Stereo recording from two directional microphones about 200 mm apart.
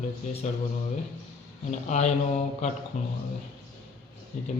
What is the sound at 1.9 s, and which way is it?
Speech, 35° left (ahead or behind).